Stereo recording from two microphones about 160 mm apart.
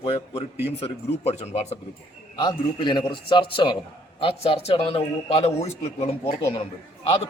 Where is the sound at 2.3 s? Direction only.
30° left (ahead or behind).